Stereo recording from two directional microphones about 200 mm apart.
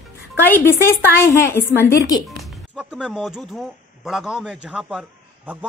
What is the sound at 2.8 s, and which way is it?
A man's voice, 5° right (ahead or behind).